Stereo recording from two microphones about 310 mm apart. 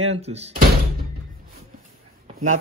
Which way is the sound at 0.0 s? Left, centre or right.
Centre.